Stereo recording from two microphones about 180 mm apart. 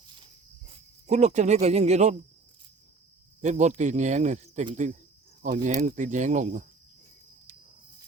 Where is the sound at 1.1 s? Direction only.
40° right (ahead or behind).